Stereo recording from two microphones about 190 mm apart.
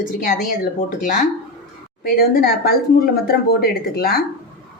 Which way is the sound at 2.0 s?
50° left (ahead or behind).